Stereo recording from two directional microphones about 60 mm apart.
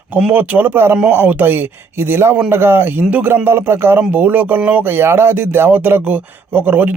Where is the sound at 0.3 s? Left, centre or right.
Right.